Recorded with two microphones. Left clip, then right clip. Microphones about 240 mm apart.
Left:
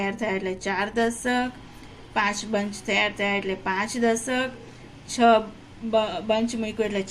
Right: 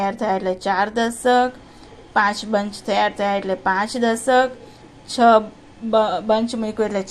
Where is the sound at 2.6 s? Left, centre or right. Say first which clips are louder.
Right 4 dB; centre.